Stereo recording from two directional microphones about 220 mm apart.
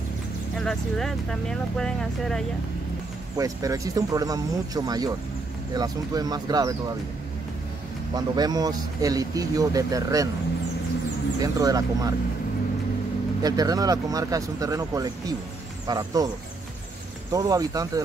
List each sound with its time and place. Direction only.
0.6 s speech: centre (ahead or behind)
3.3 s speech: 15° right (ahead or behind)
8.1 s speech: 20° right (ahead or behind)
11.4 s speech: 15° right (ahead or behind)
13.4 s speech: 15° right (ahead or behind)
17.3 s speech: 15° right (ahead or behind)